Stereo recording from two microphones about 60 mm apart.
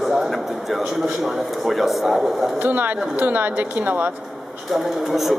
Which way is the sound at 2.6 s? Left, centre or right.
Right.